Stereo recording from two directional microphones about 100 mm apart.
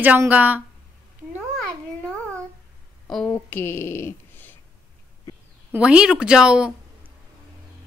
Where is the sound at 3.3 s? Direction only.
20° left (ahead or behind).